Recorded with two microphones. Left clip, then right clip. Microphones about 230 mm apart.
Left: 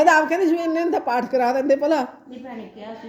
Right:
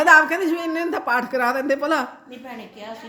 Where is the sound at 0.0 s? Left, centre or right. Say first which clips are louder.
Right 2 dB; centre.